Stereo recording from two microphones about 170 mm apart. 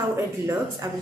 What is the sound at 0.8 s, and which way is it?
Speech, 20° right (ahead or behind).